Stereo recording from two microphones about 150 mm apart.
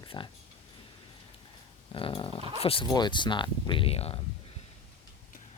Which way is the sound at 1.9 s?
35° left (ahead or behind).